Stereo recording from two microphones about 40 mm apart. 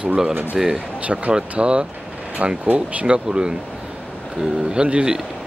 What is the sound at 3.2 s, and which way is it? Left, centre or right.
Speech, right.